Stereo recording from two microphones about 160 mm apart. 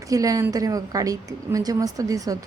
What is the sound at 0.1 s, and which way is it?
A woman's voice, 20° right (ahead or behind).